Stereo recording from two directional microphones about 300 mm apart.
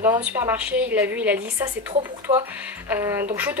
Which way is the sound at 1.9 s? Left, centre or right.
Centre.